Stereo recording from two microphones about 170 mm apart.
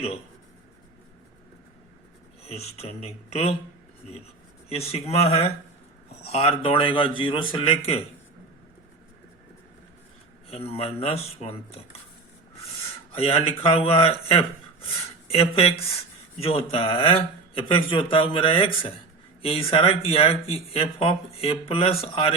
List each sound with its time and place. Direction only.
2.4 s speech: 35° left (ahead or behind)
4.7 s speech: 35° left (ahead or behind)
10.5 s speech: 35° left (ahead or behind)
13.1 s speech: 35° left (ahead or behind)